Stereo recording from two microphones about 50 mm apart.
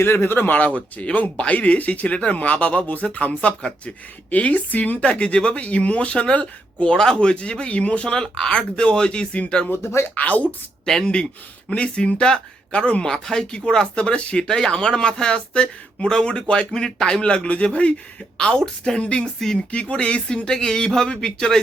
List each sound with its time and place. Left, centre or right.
0.0 s speech: left
9.6 s speech: left
10.2 s speech: left
10.8 s speech: centre
19.7 s speech: left